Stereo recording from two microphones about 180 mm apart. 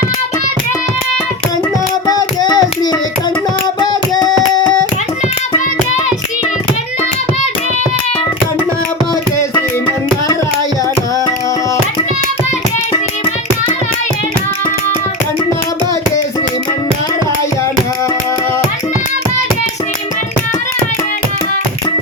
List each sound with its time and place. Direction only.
2.0 s child singing: 20° left (ahead or behind)
3.8 s hands: 20° left (ahead or behind)